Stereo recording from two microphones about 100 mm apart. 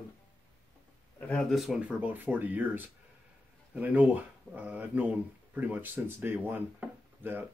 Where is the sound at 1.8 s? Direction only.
15° right (ahead or behind).